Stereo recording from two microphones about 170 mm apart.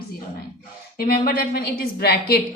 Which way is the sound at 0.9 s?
60° left (ahead or behind).